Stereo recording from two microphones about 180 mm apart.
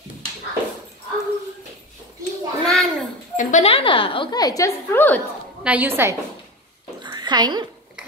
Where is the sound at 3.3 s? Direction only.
40° left (ahead or behind); by 5.2 s 10° left (ahead or behind).